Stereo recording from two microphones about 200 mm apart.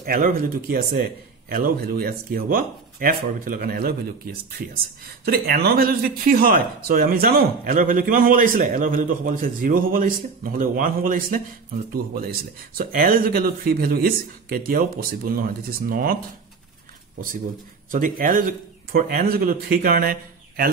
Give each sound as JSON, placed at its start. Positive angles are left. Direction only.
{"t": 0.0, "sound": "speech", "side_deg": -45}
{"t": 17.9, "sound": "speech", "side_deg": -40}